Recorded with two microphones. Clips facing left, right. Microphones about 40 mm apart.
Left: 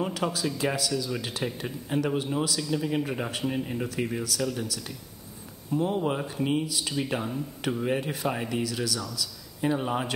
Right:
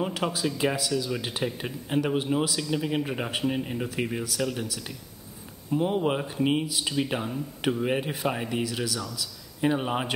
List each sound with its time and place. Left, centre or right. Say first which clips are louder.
0.0 s speech: right 1 dB; centre
9.6 s speech: right 1 dB; right